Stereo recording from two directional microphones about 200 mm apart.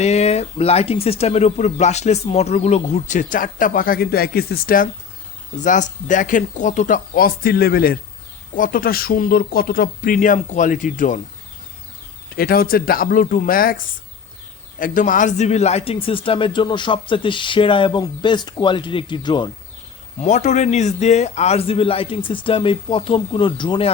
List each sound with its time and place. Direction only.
0.0 s speech: 30° left (ahead or behind)
12.4 s speech: 50° left (ahead or behind); by 19.5 s 25° left (ahead or behind)
20.1 s speech: 35° left (ahead or behind)